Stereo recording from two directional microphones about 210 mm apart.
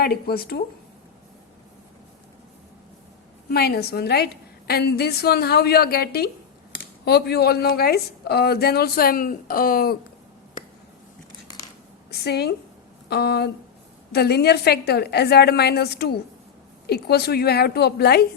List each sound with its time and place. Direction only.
0.0 s a woman's voice: 45° left (ahead or behind)
3.5 s a woman's voice: 50° left (ahead or behind)
12.1 s a woman's voice: 50° left (ahead or behind)